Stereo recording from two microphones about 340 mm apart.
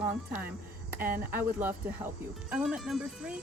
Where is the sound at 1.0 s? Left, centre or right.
Right.